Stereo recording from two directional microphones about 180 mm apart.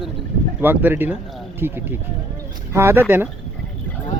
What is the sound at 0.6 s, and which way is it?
Speech, 10° right (ahead or behind).